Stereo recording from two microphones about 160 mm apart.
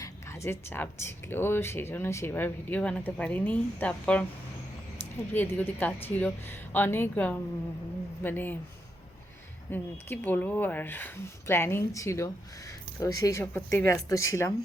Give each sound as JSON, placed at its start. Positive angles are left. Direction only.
{"t": 0.0, "sound": "speech", "side_deg": 15}
{"t": 5.3, "sound": "speech", "side_deg": 10}
{"t": 9.7, "sound": "speech", "side_deg": 10}